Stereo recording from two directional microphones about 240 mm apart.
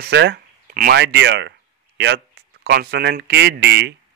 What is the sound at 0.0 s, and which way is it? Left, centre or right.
Speech, right.